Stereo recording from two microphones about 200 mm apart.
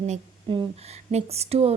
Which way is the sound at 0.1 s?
25° right (ahead or behind).